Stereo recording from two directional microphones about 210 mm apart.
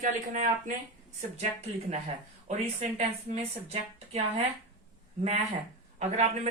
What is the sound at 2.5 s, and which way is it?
Speech, 30° right (ahead or behind).